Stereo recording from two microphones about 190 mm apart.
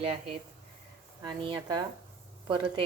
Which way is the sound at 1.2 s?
20° right (ahead or behind).